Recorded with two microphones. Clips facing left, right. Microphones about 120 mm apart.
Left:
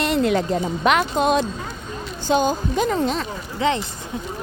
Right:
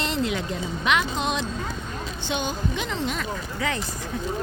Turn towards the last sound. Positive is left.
turn(degrees=25)  # may be behind; listen again after turning